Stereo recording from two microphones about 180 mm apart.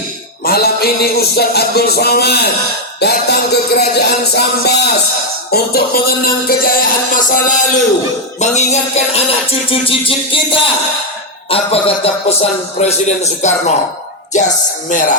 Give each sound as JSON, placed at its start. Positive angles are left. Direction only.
{"t": 0.4, "sound": "music", "side_deg": 60}
{"t": 8.4, "sound": "speech", "side_deg": 40}
{"t": 14.3, "sound": "music", "side_deg": 45}